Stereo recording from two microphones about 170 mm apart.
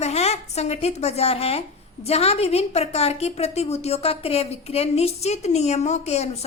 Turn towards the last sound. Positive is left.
turn(degrees=40)  # may be behind; listen again after turning